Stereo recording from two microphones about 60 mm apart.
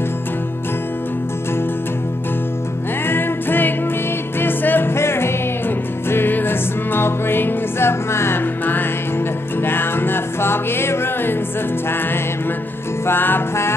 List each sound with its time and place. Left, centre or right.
3.1 s music: left
9.6 s music: left
13.0 s music: left